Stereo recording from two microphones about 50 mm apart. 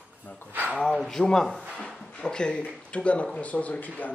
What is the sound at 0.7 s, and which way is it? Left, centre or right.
Speech, centre.